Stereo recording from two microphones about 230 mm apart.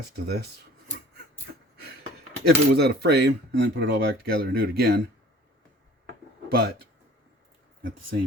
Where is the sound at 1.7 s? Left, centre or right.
Right.